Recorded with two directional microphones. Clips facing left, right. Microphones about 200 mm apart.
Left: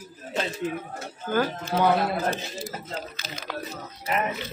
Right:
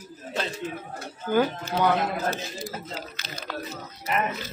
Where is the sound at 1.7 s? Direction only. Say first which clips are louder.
Left 1 dB; 15° left (ahead or behind).